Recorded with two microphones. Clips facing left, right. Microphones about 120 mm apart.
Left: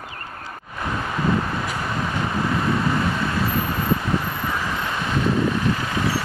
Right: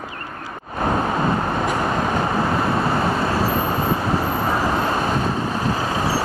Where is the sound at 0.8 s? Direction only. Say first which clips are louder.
Right 5 dB; 50° right (ahead or behind).